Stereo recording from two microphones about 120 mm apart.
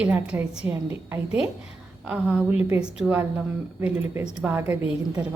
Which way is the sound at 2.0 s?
5° right (ahead or behind).